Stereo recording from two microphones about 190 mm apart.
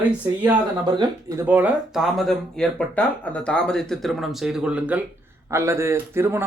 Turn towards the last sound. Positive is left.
turn(degrees=-10)  # may be behind; listen again after turning